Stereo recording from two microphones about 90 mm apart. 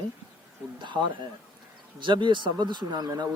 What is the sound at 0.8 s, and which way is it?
A man's voice, 60° right (ahead or behind).